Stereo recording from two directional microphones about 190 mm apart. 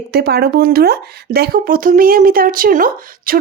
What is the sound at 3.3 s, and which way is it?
Beatboxing, 50° right (ahead or behind).